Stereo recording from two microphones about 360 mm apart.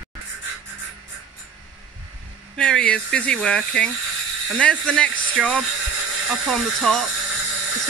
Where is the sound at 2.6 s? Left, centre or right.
Centre.